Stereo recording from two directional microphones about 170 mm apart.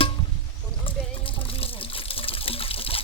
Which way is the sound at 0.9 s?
30° left (ahead or behind).